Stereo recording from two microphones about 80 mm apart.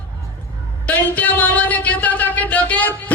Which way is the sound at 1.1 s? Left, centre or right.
Centre.